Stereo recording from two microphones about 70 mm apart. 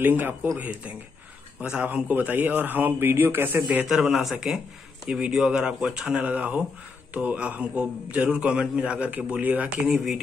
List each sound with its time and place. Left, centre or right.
0.0 s a man's voice: right
4.2 s a man's voice: centre; by 9.7 s right